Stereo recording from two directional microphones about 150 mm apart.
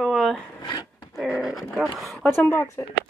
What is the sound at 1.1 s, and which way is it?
Speech, 5° right (ahead or behind).